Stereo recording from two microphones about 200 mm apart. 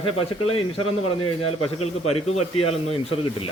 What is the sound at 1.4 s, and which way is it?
Speech, 90° left.